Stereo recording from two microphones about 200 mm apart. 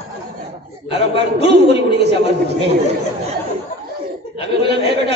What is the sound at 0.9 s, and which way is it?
A man's voice, 60° right (ahead or behind).